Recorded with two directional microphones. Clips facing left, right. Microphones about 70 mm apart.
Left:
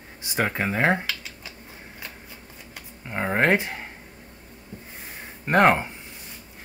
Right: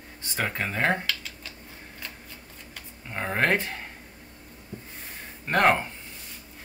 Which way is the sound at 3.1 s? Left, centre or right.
Centre.